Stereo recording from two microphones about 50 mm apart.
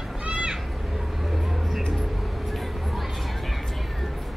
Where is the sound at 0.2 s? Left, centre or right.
Right.